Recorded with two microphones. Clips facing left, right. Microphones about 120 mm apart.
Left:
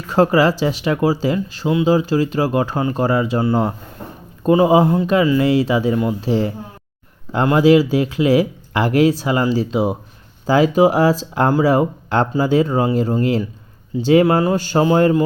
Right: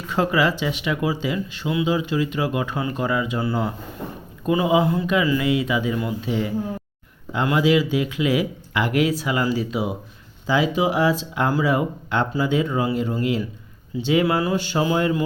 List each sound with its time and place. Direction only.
0.1 s speech: 40° left (ahead or behind)
4.4 s speech: 40° left (ahead or behind)
10.4 s speech: 45° left (ahead or behind)